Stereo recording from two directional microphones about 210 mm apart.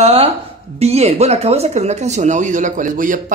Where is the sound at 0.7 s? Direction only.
30° right (ahead or behind).